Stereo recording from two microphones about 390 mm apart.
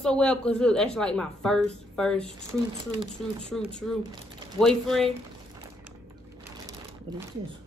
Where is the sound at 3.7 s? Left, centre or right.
Centre.